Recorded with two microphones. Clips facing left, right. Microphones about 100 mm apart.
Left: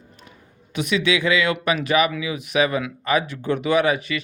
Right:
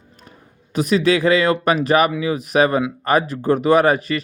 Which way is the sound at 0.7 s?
40° right (ahead or behind).